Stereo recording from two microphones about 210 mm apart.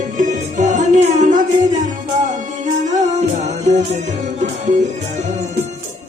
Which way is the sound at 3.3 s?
35° right (ahead or behind).